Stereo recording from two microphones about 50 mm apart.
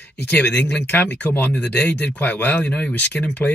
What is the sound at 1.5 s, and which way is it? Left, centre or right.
Speech, left.